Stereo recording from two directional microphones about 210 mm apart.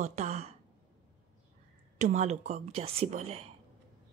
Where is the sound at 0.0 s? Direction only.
35° right (ahead or behind).